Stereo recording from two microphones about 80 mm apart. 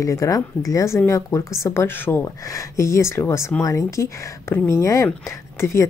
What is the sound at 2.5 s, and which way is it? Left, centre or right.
Speech, left.